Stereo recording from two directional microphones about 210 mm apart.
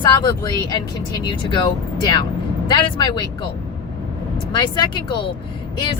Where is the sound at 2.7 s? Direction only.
20° left (ahead or behind).